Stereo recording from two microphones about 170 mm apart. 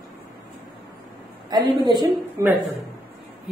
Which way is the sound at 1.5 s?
25° right (ahead or behind).